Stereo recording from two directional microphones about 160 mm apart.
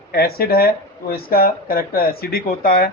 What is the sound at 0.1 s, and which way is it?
Speech, 70° left (ahead or behind).